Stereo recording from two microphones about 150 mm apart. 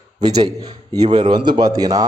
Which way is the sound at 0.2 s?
25° right (ahead or behind).